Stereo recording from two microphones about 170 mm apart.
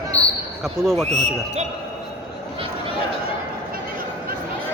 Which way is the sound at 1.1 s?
40° right (ahead or behind).